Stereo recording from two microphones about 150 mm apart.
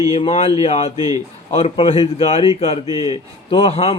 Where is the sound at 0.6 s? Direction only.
45° left (ahead or behind).